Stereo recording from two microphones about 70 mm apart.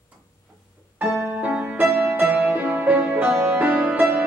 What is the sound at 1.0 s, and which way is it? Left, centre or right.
Music, centre.